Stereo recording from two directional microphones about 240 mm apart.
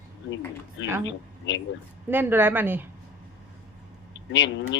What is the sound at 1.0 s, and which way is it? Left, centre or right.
Speech, left.